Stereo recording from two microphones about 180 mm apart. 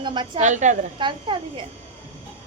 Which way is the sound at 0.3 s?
40° right (ahead or behind).